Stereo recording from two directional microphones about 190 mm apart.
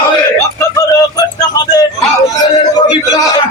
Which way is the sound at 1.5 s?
20° left (ahead or behind).